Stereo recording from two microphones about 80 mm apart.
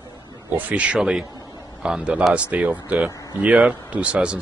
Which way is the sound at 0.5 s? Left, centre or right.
Centre.